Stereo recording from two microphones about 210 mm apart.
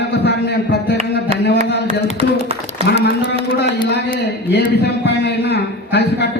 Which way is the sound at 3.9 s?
50° left (ahead or behind).